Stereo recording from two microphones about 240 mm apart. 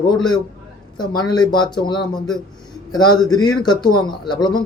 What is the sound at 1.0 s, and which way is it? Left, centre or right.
Speech, centre.